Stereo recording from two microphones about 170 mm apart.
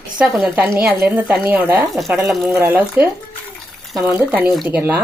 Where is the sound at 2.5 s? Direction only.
10° right (ahead or behind).